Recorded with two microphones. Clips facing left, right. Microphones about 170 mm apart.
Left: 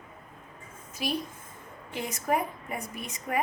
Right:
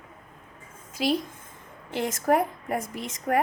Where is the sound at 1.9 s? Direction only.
80° right.